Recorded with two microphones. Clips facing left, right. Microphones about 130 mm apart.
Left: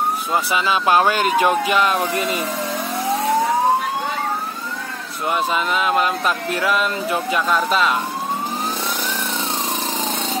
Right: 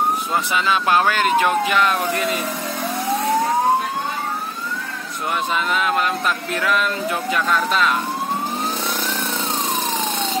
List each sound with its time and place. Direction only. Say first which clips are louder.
0.8 s speech: left 3 dB; 20° left (ahead or behind)
5.5 s speech: right 1 dB; 5° left (ahead or behind)